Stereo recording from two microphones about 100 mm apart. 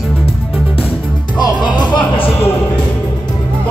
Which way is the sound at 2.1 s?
65° left (ahead or behind).